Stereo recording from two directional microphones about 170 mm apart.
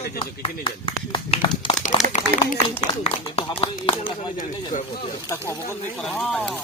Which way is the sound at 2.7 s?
35° left (ahead or behind).